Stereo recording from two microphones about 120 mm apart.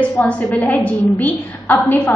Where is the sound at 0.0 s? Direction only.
10° left (ahead or behind).